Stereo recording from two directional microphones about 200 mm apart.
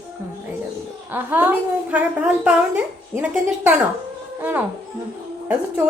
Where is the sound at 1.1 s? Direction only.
10° right (ahead or behind).